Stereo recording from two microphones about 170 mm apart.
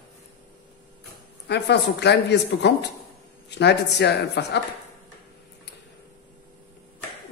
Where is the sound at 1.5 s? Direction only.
85° left.